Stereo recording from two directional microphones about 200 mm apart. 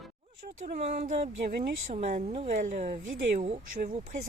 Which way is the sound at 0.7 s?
35° right (ahead or behind).